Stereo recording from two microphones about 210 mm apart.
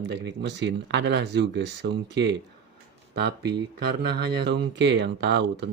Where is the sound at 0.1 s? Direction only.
55° right (ahead or behind).